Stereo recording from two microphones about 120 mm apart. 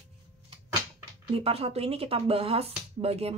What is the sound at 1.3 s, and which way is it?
Speech, 55° right (ahead or behind).